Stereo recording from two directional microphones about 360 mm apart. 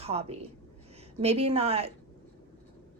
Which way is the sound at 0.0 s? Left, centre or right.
Centre.